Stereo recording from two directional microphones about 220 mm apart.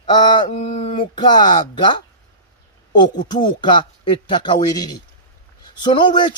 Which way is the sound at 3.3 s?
20° left (ahead or behind).